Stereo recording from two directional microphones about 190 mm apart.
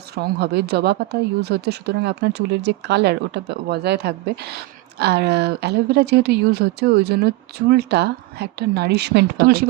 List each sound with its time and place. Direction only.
0.1 s a woman's voice: 60° right (ahead or behind)